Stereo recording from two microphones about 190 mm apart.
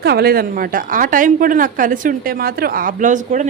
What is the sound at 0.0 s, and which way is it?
A woman's voice, 55° right (ahead or behind).